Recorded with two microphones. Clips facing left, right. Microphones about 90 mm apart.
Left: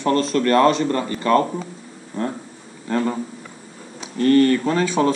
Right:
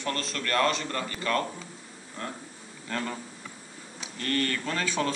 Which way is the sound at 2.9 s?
25° left (ahead or behind).